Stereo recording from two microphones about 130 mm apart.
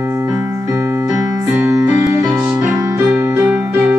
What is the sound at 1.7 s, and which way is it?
Music, 25° right (ahead or behind).